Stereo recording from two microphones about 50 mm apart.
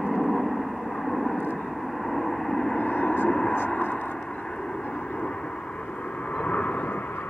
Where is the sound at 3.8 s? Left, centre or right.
Left.